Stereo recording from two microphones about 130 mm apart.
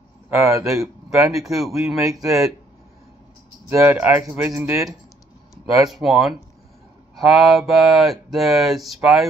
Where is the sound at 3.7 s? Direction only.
20° right (ahead or behind).